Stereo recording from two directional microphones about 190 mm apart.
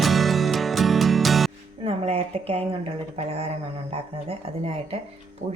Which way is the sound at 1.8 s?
30° right (ahead or behind).